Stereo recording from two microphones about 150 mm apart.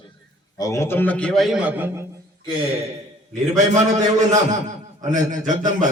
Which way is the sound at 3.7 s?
50° right (ahead or behind).